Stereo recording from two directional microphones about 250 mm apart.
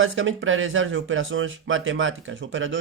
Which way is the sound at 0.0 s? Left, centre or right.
Right.